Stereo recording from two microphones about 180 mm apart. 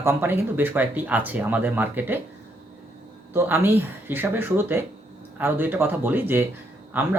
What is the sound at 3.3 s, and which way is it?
Speech, 10° right (ahead or behind).